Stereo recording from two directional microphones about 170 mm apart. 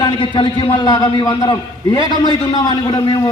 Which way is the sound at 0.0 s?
30° left (ahead or behind).